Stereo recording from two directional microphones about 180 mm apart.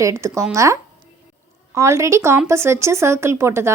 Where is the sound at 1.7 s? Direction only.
15° right (ahead or behind).